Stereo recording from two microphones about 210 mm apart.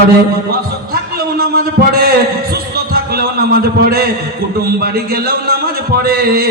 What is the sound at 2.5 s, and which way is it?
Heart sounds, 45° right (ahead or behind).